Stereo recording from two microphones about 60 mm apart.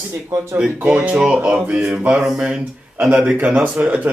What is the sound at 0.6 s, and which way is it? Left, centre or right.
Speech, right.